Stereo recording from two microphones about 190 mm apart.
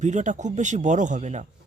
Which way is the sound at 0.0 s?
40° right (ahead or behind).